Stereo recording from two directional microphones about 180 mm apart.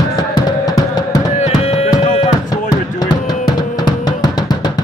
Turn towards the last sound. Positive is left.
turn(degrees=25)  # may be behind; listen again after turning